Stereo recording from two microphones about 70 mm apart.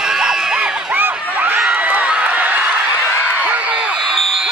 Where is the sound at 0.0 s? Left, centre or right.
Centre.